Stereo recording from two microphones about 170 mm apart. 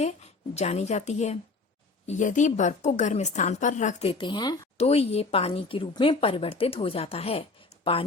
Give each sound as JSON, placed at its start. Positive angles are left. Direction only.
{"t": 0.0, "sound": "a woman's voice", "side_deg": 40}
{"t": 4.8, "sound": "a woman's voice", "side_deg": 35}